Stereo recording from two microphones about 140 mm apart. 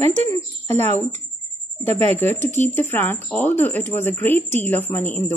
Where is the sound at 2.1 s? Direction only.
15° left (ahead or behind).